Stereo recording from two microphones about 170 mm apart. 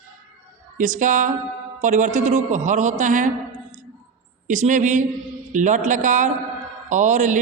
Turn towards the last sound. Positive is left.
turn(degrees=-45)  # may be behind; listen again after turning